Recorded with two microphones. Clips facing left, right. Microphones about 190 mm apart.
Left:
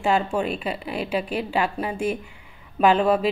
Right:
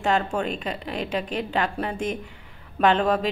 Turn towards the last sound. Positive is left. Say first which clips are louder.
# left 2 dB
turn(degrees=10)  # may be behind; listen again after turning